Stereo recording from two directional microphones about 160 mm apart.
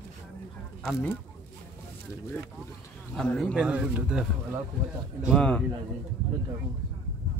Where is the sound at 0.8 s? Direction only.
10° left (ahead or behind).